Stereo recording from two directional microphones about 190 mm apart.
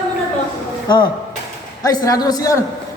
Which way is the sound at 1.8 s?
20° left (ahead or behind).